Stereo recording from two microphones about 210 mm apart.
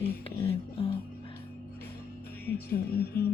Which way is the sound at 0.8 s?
25° left (ahead or behind).